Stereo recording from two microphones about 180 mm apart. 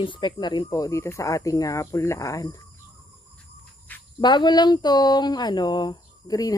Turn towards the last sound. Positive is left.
turn(degrees=20)  # may be behind; listen again after turning